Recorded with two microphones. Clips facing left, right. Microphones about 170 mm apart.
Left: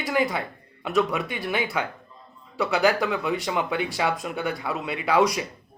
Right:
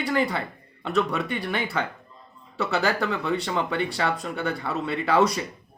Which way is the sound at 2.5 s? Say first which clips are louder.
Left 3 dB; 15° left (ahead or behind).